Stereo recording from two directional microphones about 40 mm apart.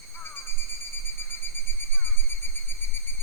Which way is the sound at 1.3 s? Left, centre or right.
Left.